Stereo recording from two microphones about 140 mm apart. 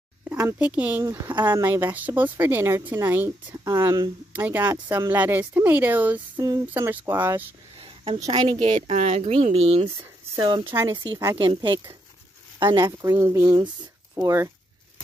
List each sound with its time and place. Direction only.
0.6 s speech: 10° right (ahead or behind)
3.6 s speech: 25° right (ahead or behind)
4.3 s speech: 15° right (ahead or behind)
6.3 s speech: 25° right (ahead or behind)
6.7 s speech: 15° right (ahead or behind)
7.8 s a sound: 40° right (ahead or behind)
8.2 s a woman's voice: 35° right (ahead or behind)
8.6 s speech: 50° right (ahead or behind)
10.6 s speech: 20° right (ahead or behind)
11.1 s a woman's voice: 30° right (ahead or behind)